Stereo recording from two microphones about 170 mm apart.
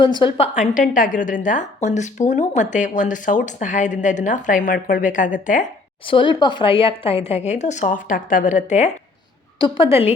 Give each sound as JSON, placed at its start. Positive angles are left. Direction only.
{"t": 0.0, "sound": "speech", "side_deg": 25}
{"t": 6.1, "sound": "a woman's voice", "side_deg": 30}
{"t": 9.6, "sound": "a woman's voice", "side_deg": 30}